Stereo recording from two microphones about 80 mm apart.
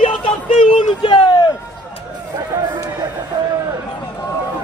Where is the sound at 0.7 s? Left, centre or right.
Left.